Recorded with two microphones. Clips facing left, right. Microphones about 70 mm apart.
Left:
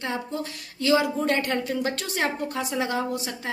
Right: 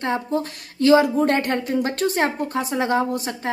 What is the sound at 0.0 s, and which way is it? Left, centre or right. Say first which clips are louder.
A woman's voice: right 7 dB; right.